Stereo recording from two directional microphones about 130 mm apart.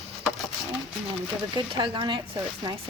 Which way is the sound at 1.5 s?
40° right (ahead or behind).